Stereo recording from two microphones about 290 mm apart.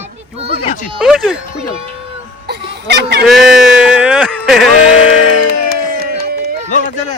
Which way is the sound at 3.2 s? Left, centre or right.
Centre.